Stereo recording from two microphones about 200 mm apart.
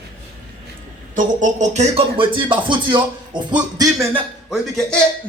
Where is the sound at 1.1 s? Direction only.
40° right (ahead or behind); by 4.2 s 15° right (ahead or behind).